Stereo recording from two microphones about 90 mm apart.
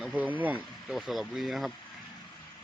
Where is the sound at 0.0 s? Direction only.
15° right (ahead or behind).